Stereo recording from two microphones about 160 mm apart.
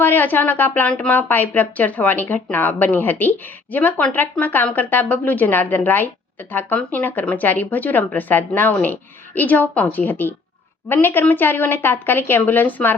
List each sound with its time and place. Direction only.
0.0 s speech: 10° left (ahead or behind)